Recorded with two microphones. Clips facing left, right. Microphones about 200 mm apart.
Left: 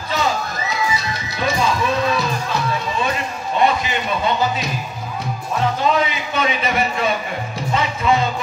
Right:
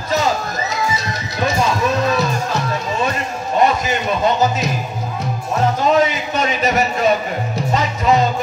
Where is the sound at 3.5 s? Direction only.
45° right (ahead or behind).